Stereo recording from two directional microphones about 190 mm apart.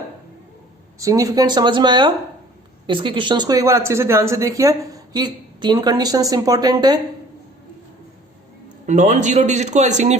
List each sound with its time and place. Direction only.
0.9 s speech: 15° right (ahead or behind)
8.9 s speech: 40° right (ahead or behind)